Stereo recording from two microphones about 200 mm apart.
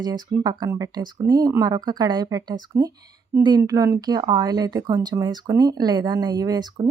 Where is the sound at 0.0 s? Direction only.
20° right (ahead or behind).